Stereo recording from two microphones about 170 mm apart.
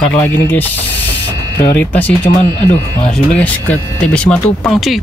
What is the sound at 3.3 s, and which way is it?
Speech, 10° left (ahead or behind).